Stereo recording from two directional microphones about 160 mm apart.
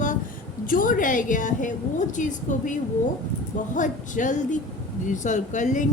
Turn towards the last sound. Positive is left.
turn(degrees=50)  # may be behind; listen again after turning